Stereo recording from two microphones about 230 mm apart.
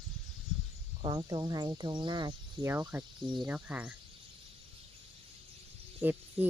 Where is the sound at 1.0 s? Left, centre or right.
Centre.